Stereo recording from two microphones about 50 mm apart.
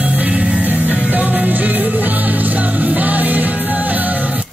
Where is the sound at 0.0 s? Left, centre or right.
Right.